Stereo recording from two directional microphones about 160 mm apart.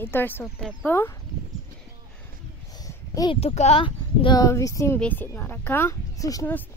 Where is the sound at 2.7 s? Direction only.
25° left (ahead or behind).